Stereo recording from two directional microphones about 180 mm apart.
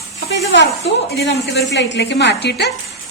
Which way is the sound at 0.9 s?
75° left (ahead or behind).